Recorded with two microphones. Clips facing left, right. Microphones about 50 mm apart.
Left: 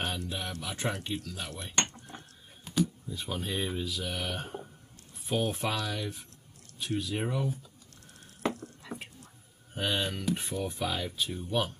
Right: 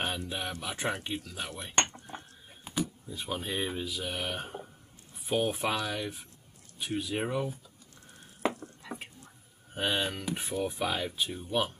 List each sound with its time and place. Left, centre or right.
0.0 s speech: centre
1.9 s a sound: centre
5.2 s speech: centre
8.4 s a sound: centre
8.8 s whispering: centre
9.8 s speech: centre